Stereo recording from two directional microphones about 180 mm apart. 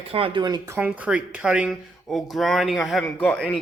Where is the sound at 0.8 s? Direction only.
10° right (ahead or behind).